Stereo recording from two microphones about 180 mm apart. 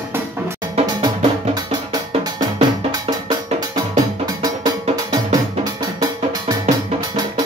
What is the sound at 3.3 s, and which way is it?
Music, 20° right (ahead or behind).